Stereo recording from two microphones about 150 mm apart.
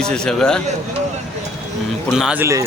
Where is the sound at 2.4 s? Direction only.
20° right (ahead or behind).